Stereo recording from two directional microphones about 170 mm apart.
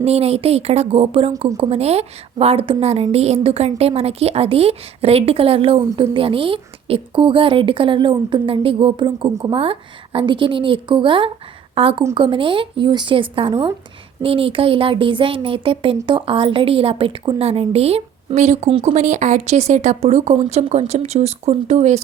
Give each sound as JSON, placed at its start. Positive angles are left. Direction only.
{"t": 0.0, "sound": "a woman's voice", "side_deg": -35}